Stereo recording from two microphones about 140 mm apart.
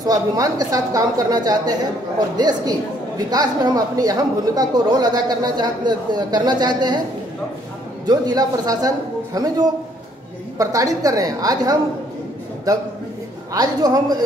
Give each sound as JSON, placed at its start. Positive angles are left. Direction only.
{"t": 0.0, "sound": "speech", "side_deg": -25}
{"t": 8.1, "sound": "speech", "side_deg": -30}
{"t": 13.5, "sound": "speech", "side_deg": -25}